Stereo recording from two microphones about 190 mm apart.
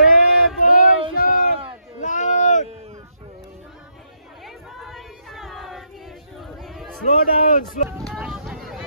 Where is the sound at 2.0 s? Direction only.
40° left (ahead or behind).